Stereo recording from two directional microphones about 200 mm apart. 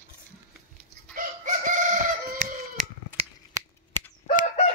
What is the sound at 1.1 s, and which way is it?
Chicken, 40° right (ahead or behind).